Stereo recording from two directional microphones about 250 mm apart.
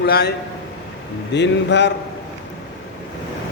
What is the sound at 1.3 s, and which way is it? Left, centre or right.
Speech, left.